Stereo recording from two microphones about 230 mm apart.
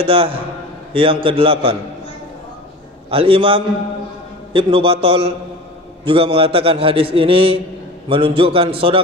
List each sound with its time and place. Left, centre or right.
0.0 s a man's voice: right
3.1 s a man's voice: right